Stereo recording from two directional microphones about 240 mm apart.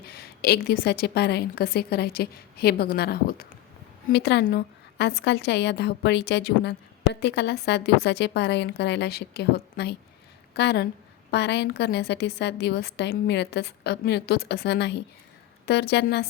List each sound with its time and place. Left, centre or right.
0.0 s a woman's voice: left